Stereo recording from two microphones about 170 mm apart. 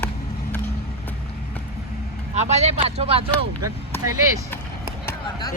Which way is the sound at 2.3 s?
40° right (ahead or behind).